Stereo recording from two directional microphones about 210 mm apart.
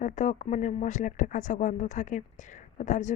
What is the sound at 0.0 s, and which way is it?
Speech, 35° left (ahead or behind).